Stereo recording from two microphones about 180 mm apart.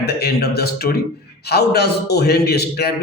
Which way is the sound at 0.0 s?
65° left (ahead or behind).